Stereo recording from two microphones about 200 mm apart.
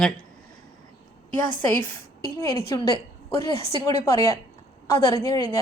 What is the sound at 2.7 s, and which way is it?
A woman's voice, 15° left (ahead or behind).